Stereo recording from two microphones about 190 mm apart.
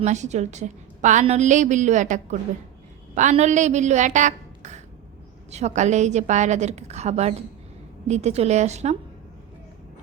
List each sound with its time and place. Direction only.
0.0 s a woman's voice: 35° right (ahead or behind)